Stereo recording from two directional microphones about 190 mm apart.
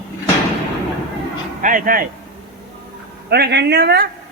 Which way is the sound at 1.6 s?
45° right (ahead or behind).